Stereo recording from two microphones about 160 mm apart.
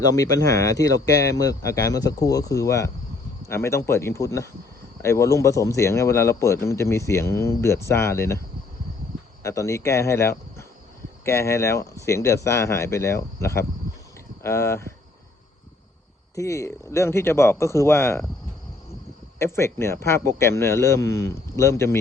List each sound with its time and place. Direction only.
0.0 s speech: 20° left (ahead or behind)
9.4 s speech: 20° left (ahead or behind)
16.3 s speech: 20° left (ahead or behind)
19.4 s speech: 15° left (ahead or behind)